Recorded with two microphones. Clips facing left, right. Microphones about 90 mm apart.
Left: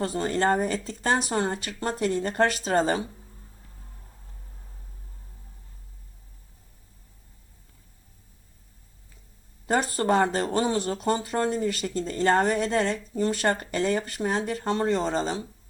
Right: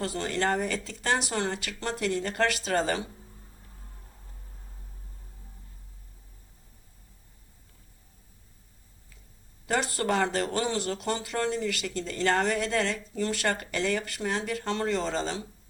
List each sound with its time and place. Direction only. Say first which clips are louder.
0.3 s speech: left 4 dB; 35° left (ahead or behind)
9.6 s a sound: left 4 dB; 35° left (ahead or behind)
10.3 s speech: left 3 dB; 35° left (ahead or behind)